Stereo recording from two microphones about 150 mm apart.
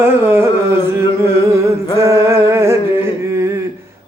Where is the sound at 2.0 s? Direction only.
20° right (ahead or behind).